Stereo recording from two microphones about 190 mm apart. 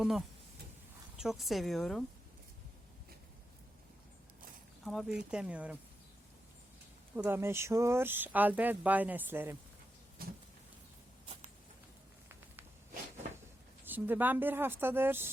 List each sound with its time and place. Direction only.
0.0 s speech: centre (ahead or behind)
4.9 s speech: centre (ahead or behind)
7.2 s speech: 10° right (ahead or behind)
10.2 s a sound: 50° right (ahead or behind)
13.8 s speech: 10° right (ahead or behind)